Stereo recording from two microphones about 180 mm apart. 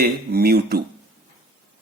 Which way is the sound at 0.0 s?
60° right (ahead or behind).